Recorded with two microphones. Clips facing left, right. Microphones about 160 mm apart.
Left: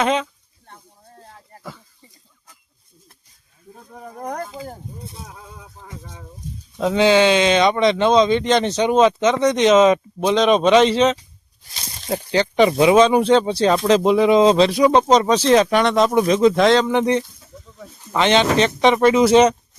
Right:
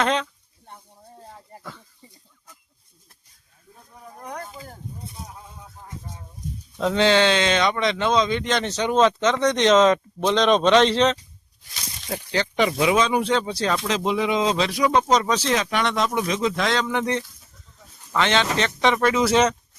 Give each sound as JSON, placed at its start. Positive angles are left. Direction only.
{"t": 0.0, "sound": "speech", "side_deg": 10}
{"t": 0.7, "sound": "a sound", "side_deg": -10}
{"t": 4.2, "sound": "speech", "side_deg": 45}
{"t": 5.3, "sound": "a sound", "side_deg": 90}
{"t": 6.7, "sound": "speech", "side_deg": 10}
{"t": 11.7, "sound": "speech", "side_deg": 30}
{"t": 13.7, "sound": "speech", "side_deg": 40}